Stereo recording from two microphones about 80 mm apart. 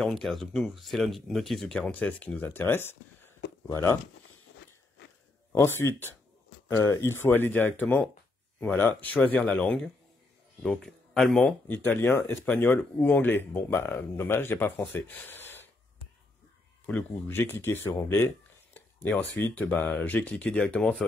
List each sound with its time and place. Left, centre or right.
0.0 s speech: centre; by 3.3 s left
5.5 s speech: left; by 11.4 s centre
11.4 s speech: left
16.8 s speech: centre